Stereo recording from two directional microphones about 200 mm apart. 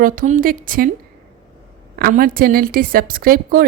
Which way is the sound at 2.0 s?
45° right (ahead or behind).